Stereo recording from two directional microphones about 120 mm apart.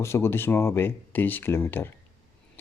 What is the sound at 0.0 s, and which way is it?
Speech, 20° left (ahead or behind).